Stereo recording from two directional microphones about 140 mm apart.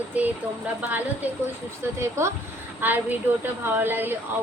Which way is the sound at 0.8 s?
10° right (ahead or behind).